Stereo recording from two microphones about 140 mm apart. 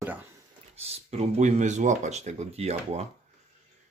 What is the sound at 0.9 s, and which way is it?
Speech, 55° right (ahead or behind).